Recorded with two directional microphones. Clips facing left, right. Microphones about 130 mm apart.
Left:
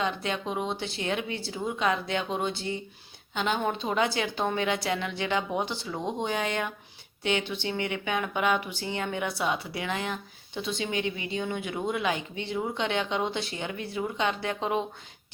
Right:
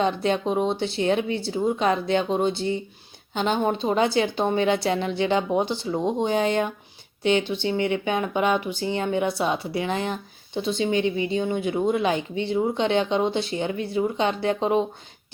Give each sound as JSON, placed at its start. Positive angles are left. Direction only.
{"t": 0.0, "sound": "speech", "side_deg": -30}